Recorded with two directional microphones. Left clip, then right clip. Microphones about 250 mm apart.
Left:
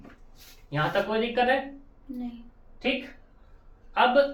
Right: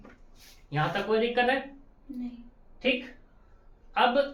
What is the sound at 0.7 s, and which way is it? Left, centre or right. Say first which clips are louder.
Speech: left 1 dB; centre.